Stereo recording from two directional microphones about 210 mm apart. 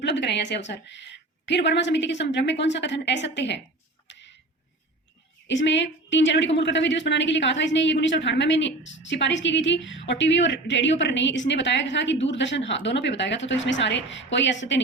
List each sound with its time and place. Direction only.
0.0 s a woman's voice: 55° left (ahead or behind)
4.1 s a sound: 55° left (ahead or behind)
5.5 s a woman's voice: 60° left (ahead or behind)